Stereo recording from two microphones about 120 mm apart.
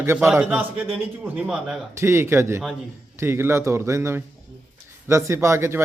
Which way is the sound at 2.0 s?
20° right (ahead or behind).